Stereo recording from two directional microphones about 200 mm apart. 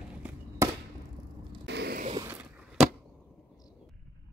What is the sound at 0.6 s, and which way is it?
Chop, 15° right (ahead or behind).